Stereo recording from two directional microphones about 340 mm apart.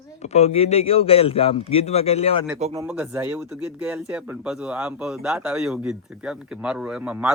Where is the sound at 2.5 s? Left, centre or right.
Centre.